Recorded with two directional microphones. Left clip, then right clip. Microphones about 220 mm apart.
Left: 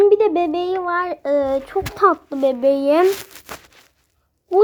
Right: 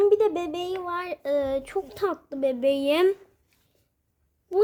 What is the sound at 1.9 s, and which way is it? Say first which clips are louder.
Speech: left 17 dB; 5° left (ahead or behind).